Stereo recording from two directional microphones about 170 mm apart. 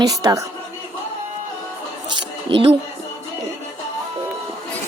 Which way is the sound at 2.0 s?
30° right (ahead or behind).